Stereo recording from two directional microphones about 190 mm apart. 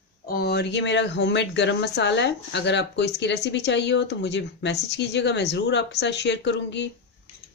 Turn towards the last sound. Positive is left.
turn(degrees=65)  # may be behind; listen again after turning